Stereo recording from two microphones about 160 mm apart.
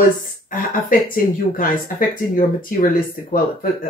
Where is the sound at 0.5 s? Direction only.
60° left (ahead or behind).